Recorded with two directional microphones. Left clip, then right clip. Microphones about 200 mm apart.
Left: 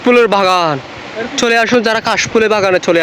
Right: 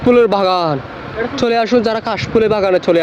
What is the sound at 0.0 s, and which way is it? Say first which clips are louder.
Speech: left 2 dB; centre (ahead or behind).